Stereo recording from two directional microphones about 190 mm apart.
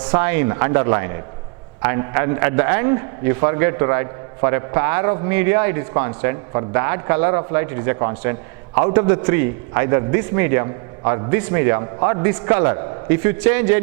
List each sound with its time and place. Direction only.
0.1 s a man's voice: 15° right (ahead or behind)